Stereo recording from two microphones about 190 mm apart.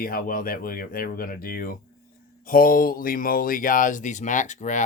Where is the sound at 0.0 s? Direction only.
50° left (ahead or behind).